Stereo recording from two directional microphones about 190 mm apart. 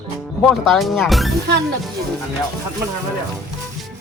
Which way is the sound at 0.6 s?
Centre (ahead or behind).